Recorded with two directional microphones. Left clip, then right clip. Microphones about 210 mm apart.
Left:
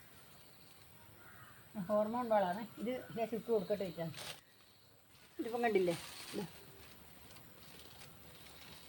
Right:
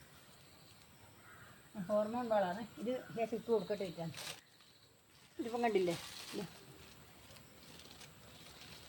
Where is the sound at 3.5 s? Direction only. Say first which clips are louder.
Left 1 dB; 25° right (ahead or behind).